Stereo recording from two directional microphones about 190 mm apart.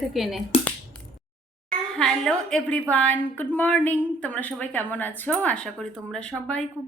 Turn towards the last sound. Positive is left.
turn(degrees=5)  # may be behind; listen again after turning